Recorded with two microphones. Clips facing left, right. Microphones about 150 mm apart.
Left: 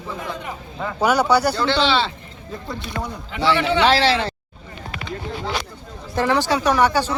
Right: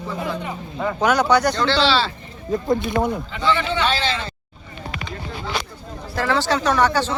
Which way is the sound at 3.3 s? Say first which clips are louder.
Left 6 dB; 70° left (ahead or behind).